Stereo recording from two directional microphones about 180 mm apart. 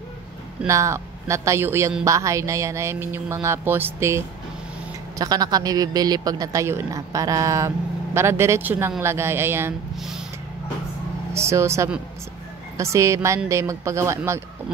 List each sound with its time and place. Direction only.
0.7 s speech: 15° right (ahead or behind)
5.2 s speech: 20° right (ahead or behind)
9.9 s a sound: centre (ahead or behind)
11.3 s speech: 15° right (ahead or behind)